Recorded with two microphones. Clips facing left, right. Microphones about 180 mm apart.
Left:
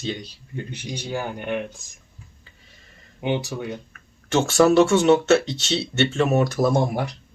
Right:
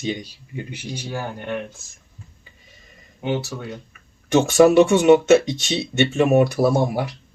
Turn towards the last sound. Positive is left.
turn(degrees=-5)  # may be behind; listen again after turning